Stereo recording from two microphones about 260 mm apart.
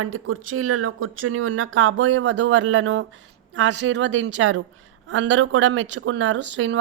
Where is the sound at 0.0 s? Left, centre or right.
Right.